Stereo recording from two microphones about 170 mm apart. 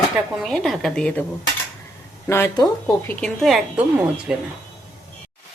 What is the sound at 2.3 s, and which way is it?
Speech, 15° left (ahead or behind).